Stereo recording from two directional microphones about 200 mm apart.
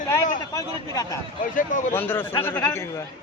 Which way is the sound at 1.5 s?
40° left (ahead or behind).